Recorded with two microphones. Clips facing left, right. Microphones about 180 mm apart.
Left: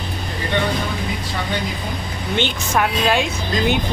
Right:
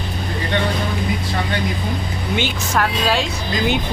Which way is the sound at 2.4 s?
Centre (ahead or behind).